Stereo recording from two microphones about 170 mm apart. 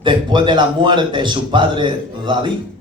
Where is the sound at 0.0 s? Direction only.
30° right (ahead or behind).